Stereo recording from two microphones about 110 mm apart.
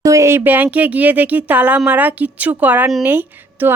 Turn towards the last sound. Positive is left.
turn(degrees=-20)  # may be behind; listen again after turning